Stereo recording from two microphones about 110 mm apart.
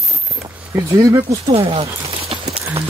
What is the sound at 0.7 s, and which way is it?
Speech, 30° right (ahead or behind).